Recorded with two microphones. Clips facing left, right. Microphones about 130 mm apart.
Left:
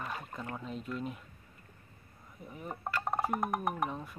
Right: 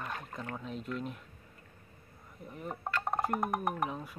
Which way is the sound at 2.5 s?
Centre (ahead or behind).